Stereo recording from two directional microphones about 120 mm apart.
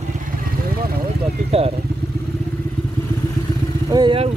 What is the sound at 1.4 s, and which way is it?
Speech, 55° right (ahead or behind).